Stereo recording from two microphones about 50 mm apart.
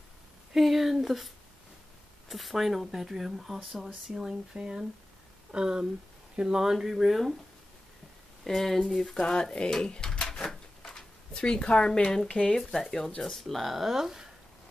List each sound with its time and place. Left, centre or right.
0.5 s speech: centre
4.1 s speech: centre
8.5 s speech: centre
10.4 s a sound: centre
11.3 s speech: left
12.5 s speech: centre